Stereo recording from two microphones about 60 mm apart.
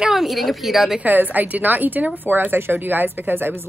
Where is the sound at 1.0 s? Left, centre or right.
Right.